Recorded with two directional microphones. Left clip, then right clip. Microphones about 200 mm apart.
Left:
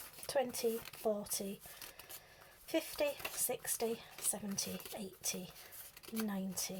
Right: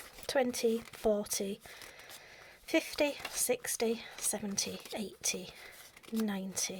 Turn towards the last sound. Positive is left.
turn(degrees=-40)  # may be behind; listen again after turning